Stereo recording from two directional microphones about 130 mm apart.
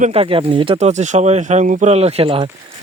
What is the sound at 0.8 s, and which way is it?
Speech, 60° right (ahead or behind).